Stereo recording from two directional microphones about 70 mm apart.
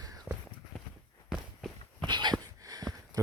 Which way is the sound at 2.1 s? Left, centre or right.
Right.